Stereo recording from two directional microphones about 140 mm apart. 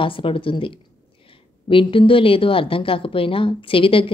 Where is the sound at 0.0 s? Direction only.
40° left (ahead or behind).